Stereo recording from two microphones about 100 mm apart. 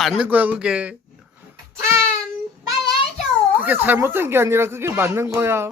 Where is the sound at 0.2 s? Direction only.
15° right (ahead or behind).